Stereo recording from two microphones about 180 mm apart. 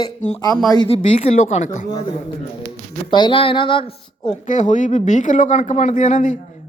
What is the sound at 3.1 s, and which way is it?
A woman's voice, 25° left (ahead or behind).